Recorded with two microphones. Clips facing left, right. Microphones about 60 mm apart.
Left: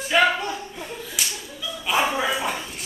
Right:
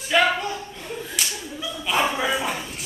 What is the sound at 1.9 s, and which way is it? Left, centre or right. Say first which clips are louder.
Bow-wow: even; centre.